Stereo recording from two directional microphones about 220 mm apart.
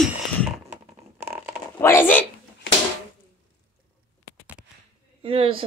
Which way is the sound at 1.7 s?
10° left (ahead or behind).